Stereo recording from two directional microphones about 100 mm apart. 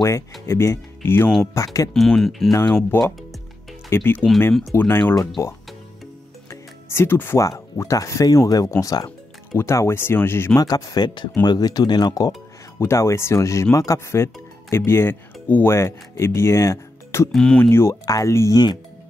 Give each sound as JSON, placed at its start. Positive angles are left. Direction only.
{"t": 0.5, "sound": "speech", "side_deg": 25}
{"t": 2.0, "sound": "speech", "side_deg": 5}
{"t": 2.5, "sound": "speech", "side_deg": 20}
{"t": 6.5, "sound": "music", "side_deg": 25}
{"t": 7.4, "sound": "speech", "side_deg": 35}
{"t": 10.5, "sound": "speech", "side_deg": 40}
{"t": 12.7, "sound": "speech", "side_deg": 25}
{"t": 17.3, "sound": "speech", "side_deg": 5}
{"t": 17.6, "sound": "speech", "side_deg": 25}